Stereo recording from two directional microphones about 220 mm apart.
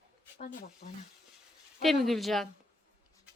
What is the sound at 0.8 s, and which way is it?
Speech, 35° left (ahead or behind).